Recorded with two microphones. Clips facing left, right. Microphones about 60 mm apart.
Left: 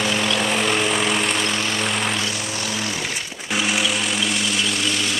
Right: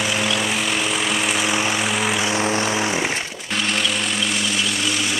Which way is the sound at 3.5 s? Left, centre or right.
Centre.